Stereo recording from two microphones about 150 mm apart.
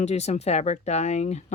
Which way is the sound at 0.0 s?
50° left (ahead or behind).